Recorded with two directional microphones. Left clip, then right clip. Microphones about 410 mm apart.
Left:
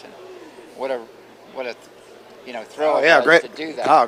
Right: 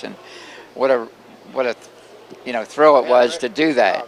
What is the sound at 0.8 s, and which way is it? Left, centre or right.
Speech, right.